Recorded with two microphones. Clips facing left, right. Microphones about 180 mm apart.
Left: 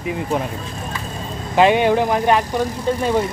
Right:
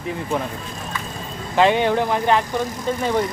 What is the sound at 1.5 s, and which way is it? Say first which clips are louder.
Speech: left 3 dB; 15° left (ahead or behind).